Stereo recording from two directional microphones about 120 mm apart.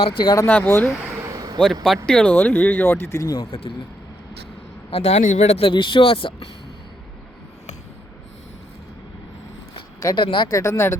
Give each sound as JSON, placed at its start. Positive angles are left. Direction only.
{"t": 0.0, "sound": "speech", "side_deg": 45}
{"t": 0.4, "sound": "speech", "side_deg": 15}
{"t": 0.9, "sound": "a sound", "side_deg": -10}
{"t": 1.2, "sound": "a sound", "side_deg": -30}
{"t": 1.6, "sound": "a man's voice", "side_deg": 5}
{"t": 3.5, "sound": "speech", "side_deg": 50}
{"t": 4.9, "sound": "speech", "side_deg": 55}
{"t": 10.0, "sound": "speech", "side_deg": 30}
{"t": 10.2, "sound": "speech", "side_deg": 40}
{"t": 10.5, "sound": "speech", "side_deg": 25}